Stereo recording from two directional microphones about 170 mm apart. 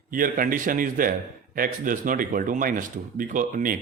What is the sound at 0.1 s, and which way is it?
A man's voice, 55° right (ahead or behind).